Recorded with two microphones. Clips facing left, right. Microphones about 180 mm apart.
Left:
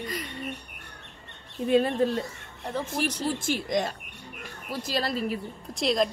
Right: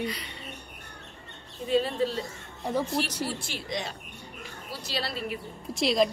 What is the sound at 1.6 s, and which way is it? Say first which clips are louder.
Speech: left 3 dB; 55° left (ahead or behind).